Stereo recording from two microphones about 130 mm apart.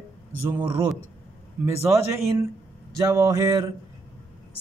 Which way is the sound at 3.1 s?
20° right (ahead or behind).